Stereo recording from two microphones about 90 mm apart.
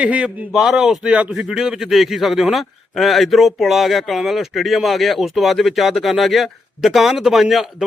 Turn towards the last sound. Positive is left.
turn(degrees=0)  # may be behind; listen again after turning